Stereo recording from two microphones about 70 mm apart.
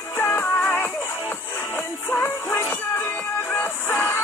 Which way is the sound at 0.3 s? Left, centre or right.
Left.